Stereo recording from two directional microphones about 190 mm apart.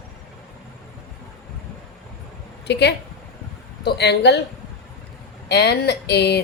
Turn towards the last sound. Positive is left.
turn(degrees=60)  # may be behind; listen again after turning